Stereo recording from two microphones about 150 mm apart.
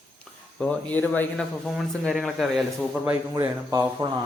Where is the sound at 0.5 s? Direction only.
10° left (ahead or behind).